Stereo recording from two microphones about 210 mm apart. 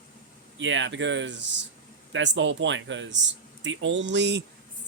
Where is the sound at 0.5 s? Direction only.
60° right (ahead or behind).